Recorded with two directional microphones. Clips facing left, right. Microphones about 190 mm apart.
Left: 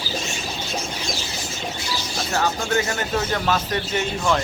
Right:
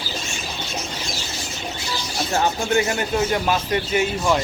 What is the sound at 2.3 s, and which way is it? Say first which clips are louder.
Speech: right 2 dB; 20° right (ahead or behind).